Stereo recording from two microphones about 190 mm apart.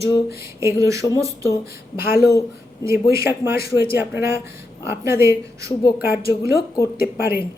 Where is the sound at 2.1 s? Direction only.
55° left (ahead or behind).